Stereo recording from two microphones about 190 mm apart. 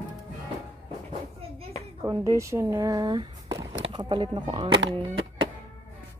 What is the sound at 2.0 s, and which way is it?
Speech, 15° right (ahead or behind).